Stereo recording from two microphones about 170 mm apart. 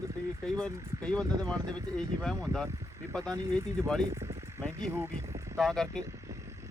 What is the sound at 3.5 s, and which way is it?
Speech, 5° left (ahead or behind).